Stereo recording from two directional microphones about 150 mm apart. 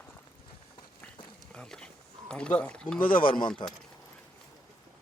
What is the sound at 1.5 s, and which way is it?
Speech, 5° left (ahead or behind).